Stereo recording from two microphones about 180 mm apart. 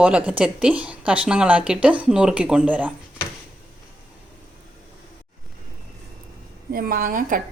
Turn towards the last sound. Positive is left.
turn(degrees=-50)  # may be behind; listen again after turning